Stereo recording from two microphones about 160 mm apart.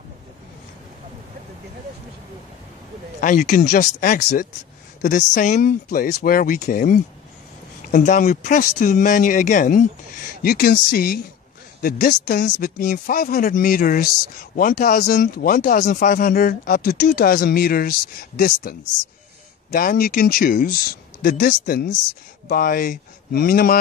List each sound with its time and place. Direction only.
3.2 s speech: 55° left (ahead or behind)
5.9 s speech: 60° left (ahead or behind)
10.4 s speech: 70° left (ahead or behind)